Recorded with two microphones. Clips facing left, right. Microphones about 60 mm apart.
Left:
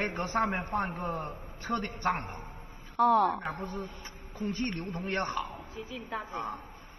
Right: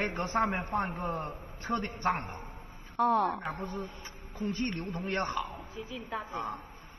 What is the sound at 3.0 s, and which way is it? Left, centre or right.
Speech, right.